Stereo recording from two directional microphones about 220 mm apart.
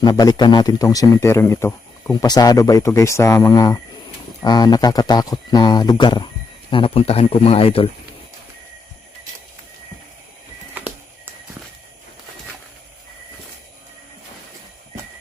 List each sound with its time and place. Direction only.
0.0 s speech: 20° left (ahead or behind)